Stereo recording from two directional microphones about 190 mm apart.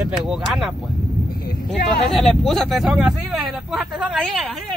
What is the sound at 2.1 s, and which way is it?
Speech, centre (ahead or behind).